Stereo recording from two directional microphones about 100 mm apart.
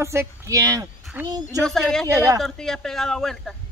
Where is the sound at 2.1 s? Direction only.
35° right (ahead or behind).